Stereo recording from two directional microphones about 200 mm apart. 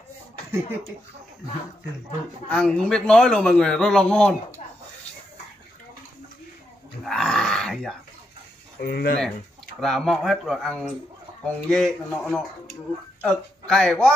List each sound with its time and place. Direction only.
0.5 s speech: 15° right (ahead or behind)
2.5 s a man's voice: 5° left (ahead or behind)
7.0 s grunt: centre (ahead or behind)
8.8 s speech: 50° left (ahead or behind)
9.8 s a man's voice: centre (ahead or behind)